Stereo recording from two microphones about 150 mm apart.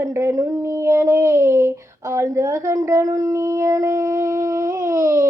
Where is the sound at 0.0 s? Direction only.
20° right (ahead or behind).